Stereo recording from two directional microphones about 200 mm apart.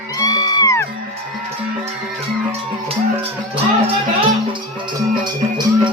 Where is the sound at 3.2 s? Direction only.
30° right (ahead or behind).